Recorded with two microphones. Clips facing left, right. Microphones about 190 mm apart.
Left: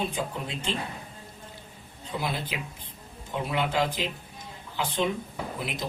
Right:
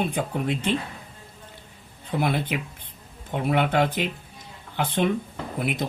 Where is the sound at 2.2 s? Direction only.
60° right (ahead or behind).